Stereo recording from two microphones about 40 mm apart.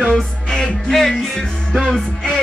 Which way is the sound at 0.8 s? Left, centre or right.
Centre.